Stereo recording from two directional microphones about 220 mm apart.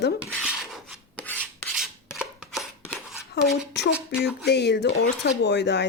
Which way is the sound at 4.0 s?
Centre (ahead or behind).